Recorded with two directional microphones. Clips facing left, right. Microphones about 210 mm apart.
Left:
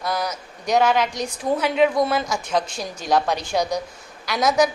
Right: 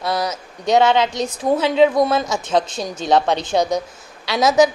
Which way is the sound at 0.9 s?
25° right (ahead or behind).